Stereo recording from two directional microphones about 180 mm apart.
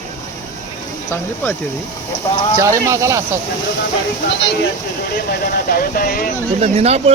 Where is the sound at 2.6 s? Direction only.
15° right (ahead or behind).